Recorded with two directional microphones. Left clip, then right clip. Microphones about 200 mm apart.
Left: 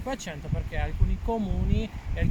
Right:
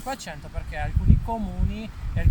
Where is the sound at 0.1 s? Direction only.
20° right (ahead or behind).